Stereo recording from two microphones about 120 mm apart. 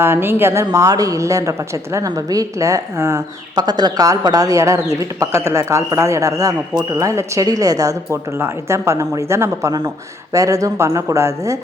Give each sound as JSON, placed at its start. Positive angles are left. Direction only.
{"t": 0.0, "sound": "a man's voice", "side_deg": -20}